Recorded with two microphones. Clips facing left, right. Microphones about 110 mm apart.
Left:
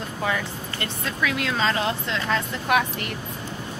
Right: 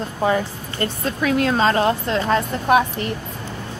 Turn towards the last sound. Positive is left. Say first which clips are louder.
# right 6 dB
turn(degrees=-30)  # may be behind; listen again after turning